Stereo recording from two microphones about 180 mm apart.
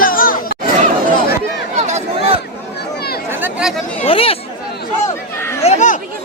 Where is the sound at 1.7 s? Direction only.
40° right (ahead or behind).